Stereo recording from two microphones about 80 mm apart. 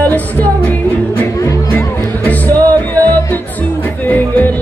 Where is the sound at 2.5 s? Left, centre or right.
Right.